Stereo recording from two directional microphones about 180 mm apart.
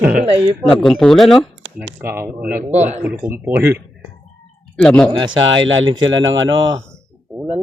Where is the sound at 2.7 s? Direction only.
40° right (ahead or behind).